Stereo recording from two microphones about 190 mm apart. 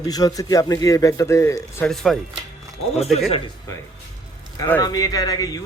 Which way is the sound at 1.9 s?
Centre (ahead or behind).